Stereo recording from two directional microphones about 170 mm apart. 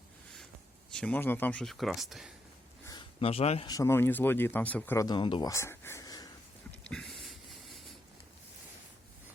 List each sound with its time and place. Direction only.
0.9 s speech: 5° left (ahead or behind)
3.2 s speech: 35° left (ahead or behind)
3.7 s speech: 15° left (ahead or behind)
5.0 s speech: 30° left (ahead or behind)
6.7 s a sound: 5° left (ahead or behind)